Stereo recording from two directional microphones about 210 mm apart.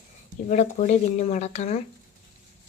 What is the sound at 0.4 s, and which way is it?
Speech, 35° left (ahead or behind).